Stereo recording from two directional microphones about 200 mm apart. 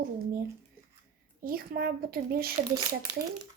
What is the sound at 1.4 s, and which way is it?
A child's voice, 50° right (ahead or behind).